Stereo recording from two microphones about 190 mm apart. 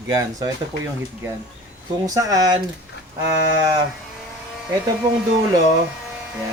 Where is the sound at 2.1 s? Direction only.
15° right (ahead or behind).